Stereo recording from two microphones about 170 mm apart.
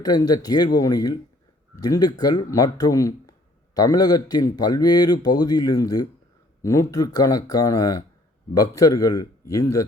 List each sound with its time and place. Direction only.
0.0 s speech: 20° left (ahead or behind)